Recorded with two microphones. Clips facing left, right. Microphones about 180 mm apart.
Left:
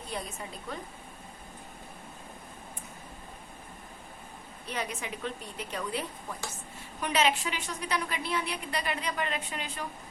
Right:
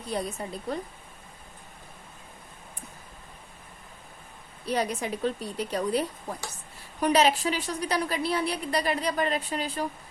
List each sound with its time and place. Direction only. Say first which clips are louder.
0.1 s a woman's voice: right 8 dB; 35° right (ahead or behind)
4.6 s a woman's voice: right 8 dB; 35° right (ahead or behind)